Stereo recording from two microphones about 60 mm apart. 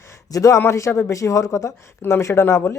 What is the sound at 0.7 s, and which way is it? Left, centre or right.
Speech, left.